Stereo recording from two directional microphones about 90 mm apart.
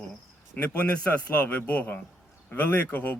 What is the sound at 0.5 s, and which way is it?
Speech, 20° left (ahead or behind).